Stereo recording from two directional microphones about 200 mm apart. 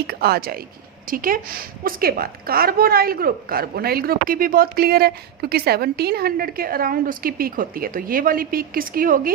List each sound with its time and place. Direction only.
0.1 s a woman's voice: 50° right (ahead or behind)